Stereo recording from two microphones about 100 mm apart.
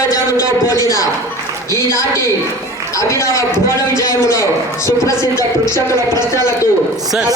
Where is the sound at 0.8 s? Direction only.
35° left (ahead or behind).